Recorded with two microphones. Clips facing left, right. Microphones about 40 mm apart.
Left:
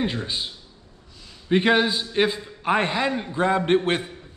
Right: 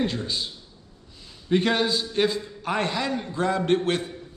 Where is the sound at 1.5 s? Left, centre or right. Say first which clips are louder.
Left 3 dB; left.